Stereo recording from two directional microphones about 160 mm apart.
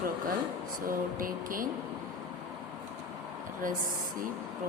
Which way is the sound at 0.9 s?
60° right (ahead or behind).